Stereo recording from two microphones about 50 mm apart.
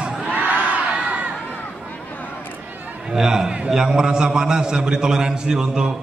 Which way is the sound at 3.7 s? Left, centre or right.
Centre.